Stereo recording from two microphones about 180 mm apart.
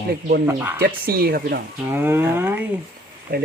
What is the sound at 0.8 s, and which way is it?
Speech, 55° right (ahead or behind).